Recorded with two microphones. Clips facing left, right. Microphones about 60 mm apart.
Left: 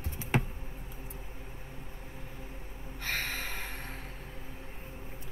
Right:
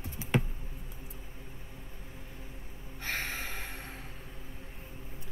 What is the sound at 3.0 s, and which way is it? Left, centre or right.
Gasp, centre.